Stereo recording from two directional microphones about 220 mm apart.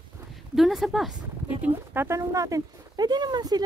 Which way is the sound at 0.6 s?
Centre (ahead or behind).